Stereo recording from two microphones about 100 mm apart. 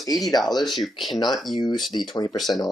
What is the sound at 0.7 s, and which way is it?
Speech, centre (ahead or behind).